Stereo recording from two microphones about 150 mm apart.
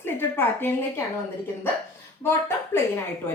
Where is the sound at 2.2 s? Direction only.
15° left (ahead or behind).